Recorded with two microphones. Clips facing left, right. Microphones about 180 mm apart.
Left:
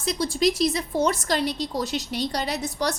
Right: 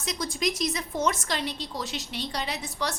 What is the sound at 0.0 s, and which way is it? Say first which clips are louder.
A woman's voice: left 7 dB; 30° left (ahead or behind).